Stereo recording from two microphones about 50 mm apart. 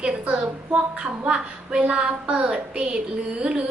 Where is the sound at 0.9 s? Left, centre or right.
Right.